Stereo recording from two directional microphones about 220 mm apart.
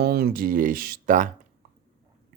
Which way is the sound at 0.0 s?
45° right (ahead or behind).